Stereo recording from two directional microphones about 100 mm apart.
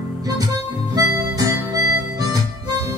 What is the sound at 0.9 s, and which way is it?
Harmonica, 35° right (ahead or behind).